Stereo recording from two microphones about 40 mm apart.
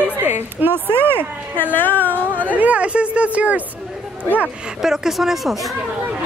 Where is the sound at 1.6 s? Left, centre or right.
Left.